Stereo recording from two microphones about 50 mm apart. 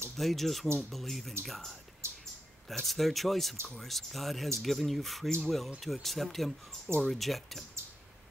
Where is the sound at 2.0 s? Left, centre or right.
Right.